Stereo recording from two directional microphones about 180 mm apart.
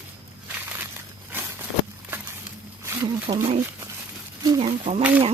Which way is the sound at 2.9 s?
20° right (ahead or behind).